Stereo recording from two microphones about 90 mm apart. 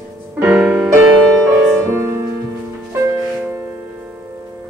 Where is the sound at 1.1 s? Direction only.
25° right (ahead or behind).